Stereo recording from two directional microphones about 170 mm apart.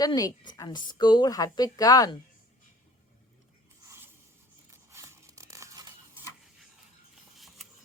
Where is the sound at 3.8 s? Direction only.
15° right (ahead or behind).